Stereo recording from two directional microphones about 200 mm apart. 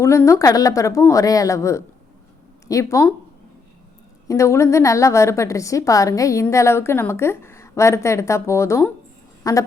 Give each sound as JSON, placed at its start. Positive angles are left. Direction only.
{"t": 0.0, "sound": "a woman's voice", "side_deg": 15}
{"t": 4.3, "sound": "a woman's voice", "side_deg": 15}